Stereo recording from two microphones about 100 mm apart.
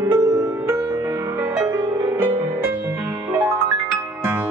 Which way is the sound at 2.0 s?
20° right (ahead or behind).